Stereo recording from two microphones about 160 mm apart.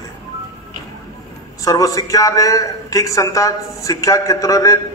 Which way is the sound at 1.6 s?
20° left (ahead or behind).